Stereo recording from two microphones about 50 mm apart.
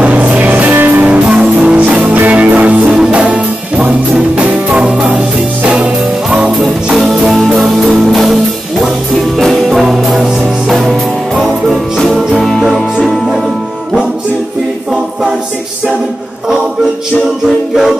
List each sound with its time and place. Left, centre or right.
0.0 s music: right
4.7 s music: centre
7.2 s music: centre
9.4 s music: centre